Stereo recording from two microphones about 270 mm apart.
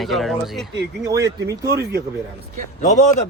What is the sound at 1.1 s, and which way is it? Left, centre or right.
Speech, centre.